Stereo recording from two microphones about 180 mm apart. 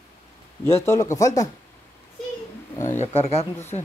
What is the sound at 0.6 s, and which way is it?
Speech, 15° left (ahead or behind).